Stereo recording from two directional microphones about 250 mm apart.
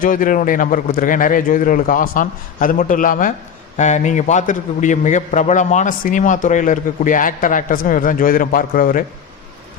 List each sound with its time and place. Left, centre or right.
0.0 s a man's voice: left